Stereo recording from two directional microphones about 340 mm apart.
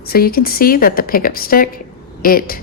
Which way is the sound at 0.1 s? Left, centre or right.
Left.